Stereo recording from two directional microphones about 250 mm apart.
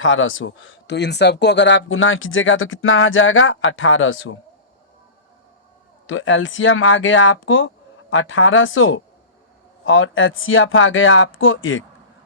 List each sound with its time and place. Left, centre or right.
0.0 s speech: left
6.1 s speech: left